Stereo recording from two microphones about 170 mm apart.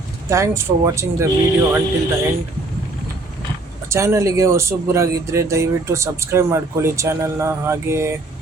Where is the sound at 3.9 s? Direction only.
15° right (ahead or behind).